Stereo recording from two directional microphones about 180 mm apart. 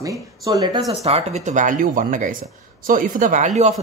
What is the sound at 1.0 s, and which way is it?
Speech, 35° right (ahead or behind).